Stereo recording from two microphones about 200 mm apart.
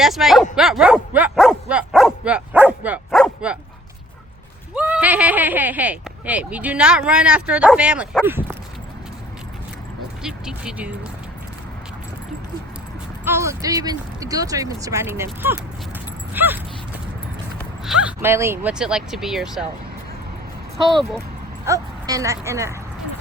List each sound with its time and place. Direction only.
0.0 s speech: centre (ahead or behind)
0.5 s dog: 5° right (ahead or behind)
4.7 s speech: 5° right (ahead or behind)
10.2 s speech: 5° right (ahead or behind)
13.2 s speech: 15° right (ahead or behind)
17.8 s speech: 5° right (ahead or behind)
21.7 s speech: 15° right (ahead or behind)